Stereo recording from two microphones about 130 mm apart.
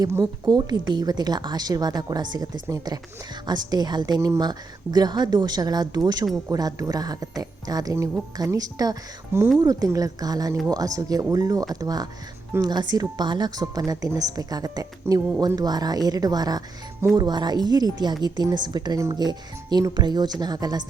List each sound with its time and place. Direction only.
0.4 s a woman's voice: 35° right (ahead or behind)
15.1 s speech: 20° right (ahead or behind)
15.4 s a woman's voice: 30° right (ahead or behind)